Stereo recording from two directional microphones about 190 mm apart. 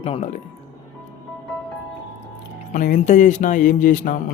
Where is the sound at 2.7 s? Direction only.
45° left (ahead or behind).